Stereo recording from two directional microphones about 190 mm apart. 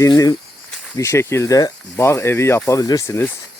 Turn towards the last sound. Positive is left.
turn(degrees=15)  # may be behind; listen again after turning